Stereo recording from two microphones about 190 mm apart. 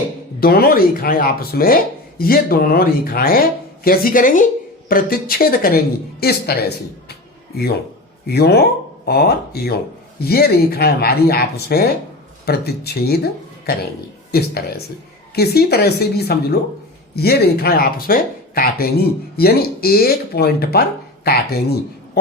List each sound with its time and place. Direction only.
0.3 s a woman's voice: 50° left (ahead or behind)
14.3 s speech: 55° left (ahead or behind)